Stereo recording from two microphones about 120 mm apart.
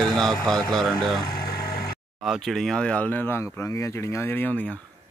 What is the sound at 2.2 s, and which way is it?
Mantra, centre (ahead or behind).